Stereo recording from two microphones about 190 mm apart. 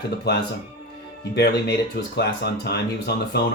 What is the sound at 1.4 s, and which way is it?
Speech, 60° left (ahead or behind).